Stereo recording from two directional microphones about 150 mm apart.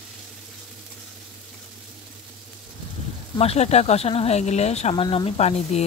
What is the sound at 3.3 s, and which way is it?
Speech, 45° left (ahead or behind).